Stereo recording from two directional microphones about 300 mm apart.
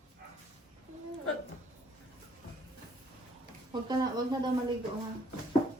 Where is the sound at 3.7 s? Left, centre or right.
Centre.